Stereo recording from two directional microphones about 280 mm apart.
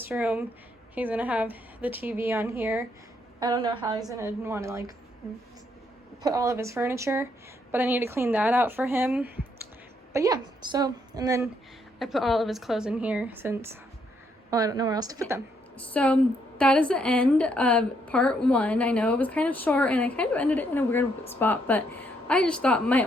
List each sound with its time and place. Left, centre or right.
0.0 s a woman's voice: centre
6.2 s a woman's voice: centre
11.9 s a woman's voice: centre
15.8 s a woman's voice: centre